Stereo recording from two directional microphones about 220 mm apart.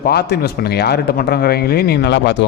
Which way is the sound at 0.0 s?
45° left (ahead or behind).